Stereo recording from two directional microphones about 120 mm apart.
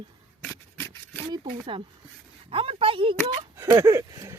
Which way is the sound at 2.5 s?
50° right (ahead or behind).